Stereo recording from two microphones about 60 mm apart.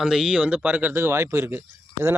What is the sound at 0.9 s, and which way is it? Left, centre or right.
Speech, right.